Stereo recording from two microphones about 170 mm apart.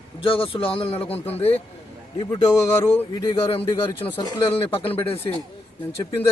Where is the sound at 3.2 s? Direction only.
30° left (ahead or behind).